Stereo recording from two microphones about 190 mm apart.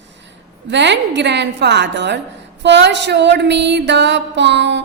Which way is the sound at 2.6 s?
65° right (ahead or behind).